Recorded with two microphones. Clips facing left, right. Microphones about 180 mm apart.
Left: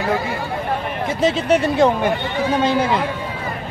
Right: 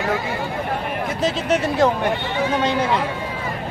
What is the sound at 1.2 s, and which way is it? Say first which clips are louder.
Speech: left 4 dB; centre (ahead or behind).